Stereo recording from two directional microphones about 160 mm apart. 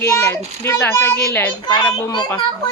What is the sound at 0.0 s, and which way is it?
A child's voice, 15° left (ahead or behind).